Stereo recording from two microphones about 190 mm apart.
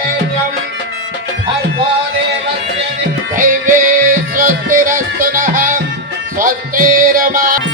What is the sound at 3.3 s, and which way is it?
Music, 45° right (ahead or behind).